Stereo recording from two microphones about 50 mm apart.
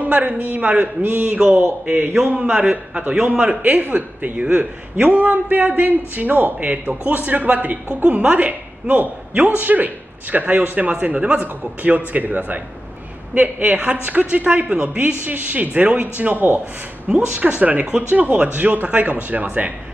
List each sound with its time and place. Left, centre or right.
0.0 s a man's voice: right